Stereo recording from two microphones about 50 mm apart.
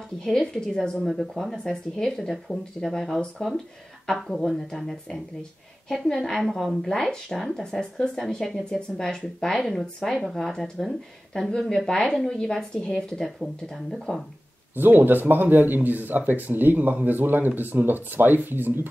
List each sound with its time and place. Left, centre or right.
0.2 s speech: centre
1.0 s a woman's voice: centre
6.2 s a woman's voice: centre
8.6 s speech: centre
14.8 s speech: right